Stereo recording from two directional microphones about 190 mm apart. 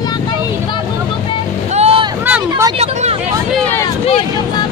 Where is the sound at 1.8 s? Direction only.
30° right (ahead or behind).